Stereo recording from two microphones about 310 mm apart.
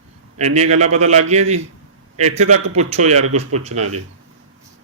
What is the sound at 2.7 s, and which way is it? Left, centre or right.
Speech, right.